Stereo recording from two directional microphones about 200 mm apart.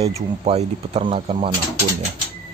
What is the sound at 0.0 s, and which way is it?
Speech, 30° right (ahead or behind).